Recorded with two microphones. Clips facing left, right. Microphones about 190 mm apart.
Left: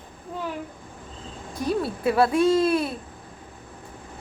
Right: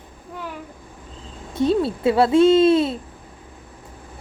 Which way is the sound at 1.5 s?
25° right (ahead or behind).